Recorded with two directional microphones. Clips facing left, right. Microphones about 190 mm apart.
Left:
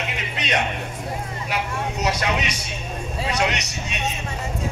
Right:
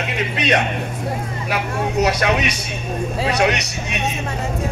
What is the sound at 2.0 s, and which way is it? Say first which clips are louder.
A man's voice: right 5 dB; 65° right (ahead or behind).